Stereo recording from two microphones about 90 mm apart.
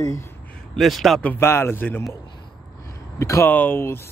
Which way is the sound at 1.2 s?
25° left (ahead or behind).